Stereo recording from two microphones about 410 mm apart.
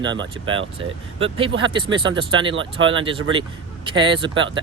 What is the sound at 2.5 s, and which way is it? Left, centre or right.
Speech, right.